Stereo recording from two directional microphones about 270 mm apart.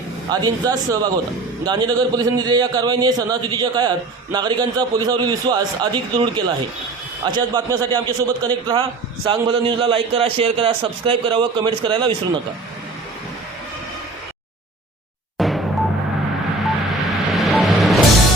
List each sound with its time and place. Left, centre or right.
0.3 s a man's voice: centre
15.4 s music: centre
16.6 s vehicle: centre